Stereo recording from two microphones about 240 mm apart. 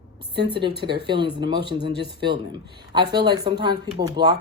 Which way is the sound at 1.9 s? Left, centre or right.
Right.